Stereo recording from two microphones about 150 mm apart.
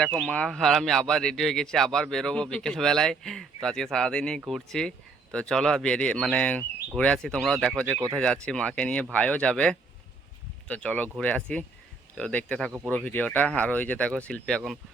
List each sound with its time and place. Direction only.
0.0 s speech: 5° left (ahead or behind)
7.9 s speech: 20° right (ahead or behind)
8.1 s speech: 5° left (ahead or behind)